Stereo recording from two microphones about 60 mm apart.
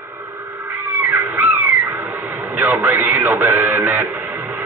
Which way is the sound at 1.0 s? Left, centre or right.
Right.